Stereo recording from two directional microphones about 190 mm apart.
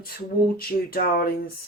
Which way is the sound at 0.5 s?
50° left (ahead or behind).